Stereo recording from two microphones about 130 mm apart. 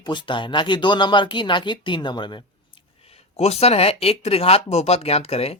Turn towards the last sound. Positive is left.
turn(degrees=50)  # may be behind; listen again after turning